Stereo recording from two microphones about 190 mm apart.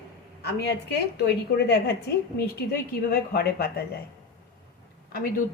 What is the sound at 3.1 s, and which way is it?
Speech, 55° left (ahead or behind).